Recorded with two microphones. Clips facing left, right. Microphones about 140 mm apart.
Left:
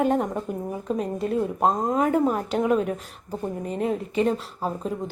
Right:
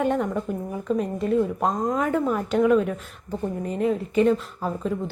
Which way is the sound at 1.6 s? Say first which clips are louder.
Left 2 dB; 30° left (ahead or behind).